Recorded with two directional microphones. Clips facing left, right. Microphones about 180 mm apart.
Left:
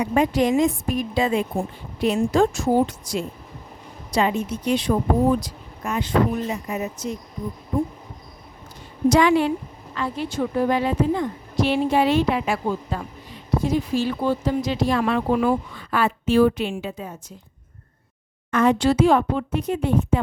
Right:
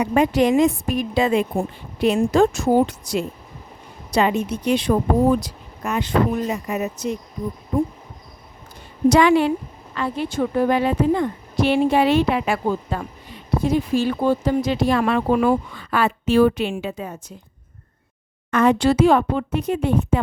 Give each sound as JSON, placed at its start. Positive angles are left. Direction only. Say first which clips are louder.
{"t": 0.0, "sound": "speech", "louder": "right 2 dB", "side_deg": -70}
{"t": 9.0, "sound": "speech", "louder": "right 2 dB", "side_deg": -70}
{"t": 18.5, "sound": "speech", "louder": "right 2 dB", "side_deg": -65}